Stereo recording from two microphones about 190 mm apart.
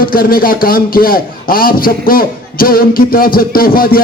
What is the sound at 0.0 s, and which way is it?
A man's voice, 50° left (ahead or behind).